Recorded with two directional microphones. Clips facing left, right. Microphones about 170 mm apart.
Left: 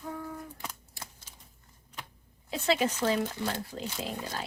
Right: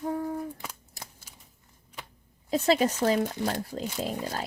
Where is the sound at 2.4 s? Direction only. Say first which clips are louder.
Right 4 dB; 40° right (ahead or behind).